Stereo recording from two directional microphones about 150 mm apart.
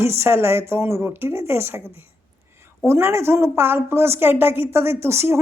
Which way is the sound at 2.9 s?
20° right (ahead or behind).